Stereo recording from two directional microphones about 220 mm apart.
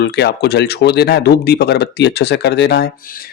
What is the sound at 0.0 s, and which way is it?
Speech, 50° left (ahead or behind).